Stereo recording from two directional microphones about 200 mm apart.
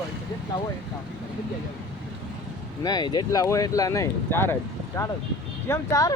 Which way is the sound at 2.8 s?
20° left (ahead or behind).